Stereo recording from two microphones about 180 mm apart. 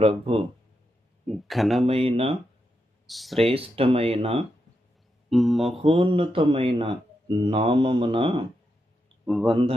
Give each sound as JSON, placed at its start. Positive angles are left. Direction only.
{"t": 0.0, "sound": "speech", "side_deg": -30}
{"t": 1.3, "sound": "speech", "side_deg": 0}
{"t": 1.9, "sound": "speech", "side_deg": -30}
{"t": 3.1, "sound": "speech", "side_deg": 0}
{"t": 3.3, "sound": "speech", "side_deg": -30}
{"t": 5.3, "sound": "speech", "side_deg": 0}
{"t": 5.7, "sound": "speech", "side_deg": -30}
{"t": 9.2, "sound": "speech", "side_deg": 0}